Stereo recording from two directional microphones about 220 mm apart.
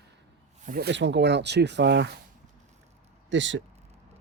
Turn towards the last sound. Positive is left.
turn(degrees=-55)  # may be behind; listen again after turning